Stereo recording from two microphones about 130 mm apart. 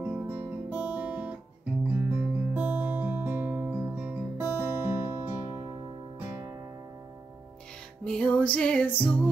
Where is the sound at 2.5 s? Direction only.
15° right (ahead or behind).